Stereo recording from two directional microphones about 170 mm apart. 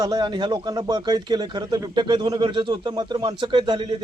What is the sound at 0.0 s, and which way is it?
Speech, 25° right (ahead or behind).